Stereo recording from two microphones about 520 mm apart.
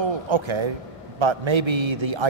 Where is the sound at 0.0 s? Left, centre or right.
Right.